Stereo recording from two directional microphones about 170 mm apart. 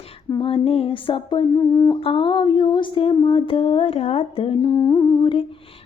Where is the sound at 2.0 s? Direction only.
30° left (ahead or behind).